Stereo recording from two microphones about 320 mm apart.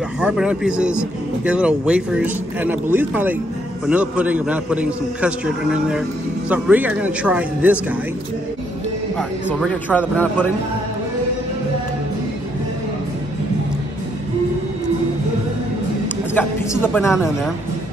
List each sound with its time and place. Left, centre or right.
0.2 s a man's voice: centre
9.1 s a man's voice: centre
16.3 s a man's voice: centre